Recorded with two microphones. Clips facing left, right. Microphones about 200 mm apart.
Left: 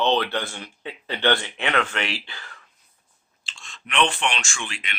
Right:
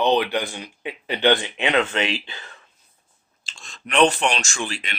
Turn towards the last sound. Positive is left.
turn(degrees=-35)  # may be behind; listen again after turning